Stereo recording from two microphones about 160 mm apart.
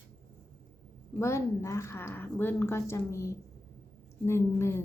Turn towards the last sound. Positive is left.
turn(degrees=15)  # may be behind; listen again after turning